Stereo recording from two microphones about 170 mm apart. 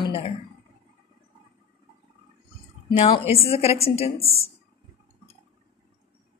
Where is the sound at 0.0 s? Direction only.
35° left (ahead or behind).